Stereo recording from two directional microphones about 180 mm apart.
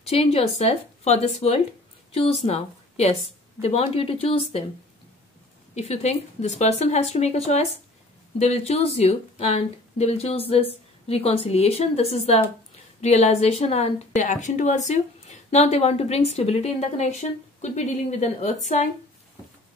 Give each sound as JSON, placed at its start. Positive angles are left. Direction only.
{"t": 0.0, "sound": "a woman's voice", "side_deg": 35}
{"t": 5.8, "sound": "a woman's voice", "side_deg": 35}